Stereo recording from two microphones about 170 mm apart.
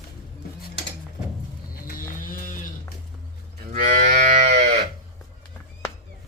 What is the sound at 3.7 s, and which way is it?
Moo, 50° right (ahead or behind).